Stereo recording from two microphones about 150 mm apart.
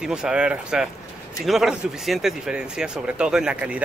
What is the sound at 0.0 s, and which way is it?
Speech, 5° right (ahead or behind).